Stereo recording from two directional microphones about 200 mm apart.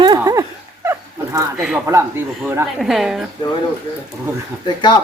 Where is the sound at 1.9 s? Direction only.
15° right (ahead or behind).